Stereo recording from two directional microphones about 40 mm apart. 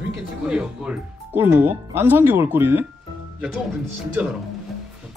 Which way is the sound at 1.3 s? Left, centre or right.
Right.